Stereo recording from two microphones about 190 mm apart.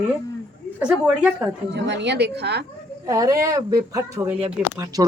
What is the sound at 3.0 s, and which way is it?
Speech, 20° right (ahead or behind).